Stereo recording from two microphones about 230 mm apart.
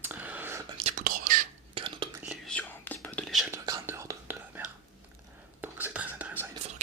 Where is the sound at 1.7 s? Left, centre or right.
Right.